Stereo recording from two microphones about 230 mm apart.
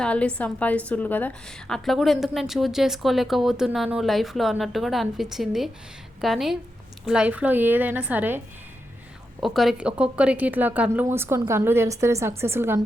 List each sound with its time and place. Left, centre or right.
0.0 s a woman's voice: centre
9.4 s a woman's voice: centre